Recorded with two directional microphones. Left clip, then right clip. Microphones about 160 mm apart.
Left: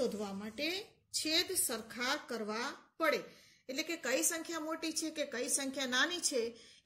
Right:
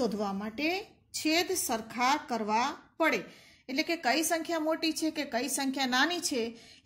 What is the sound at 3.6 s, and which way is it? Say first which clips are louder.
A woman's voice: right 8 dB; 45° right (ahead or behind).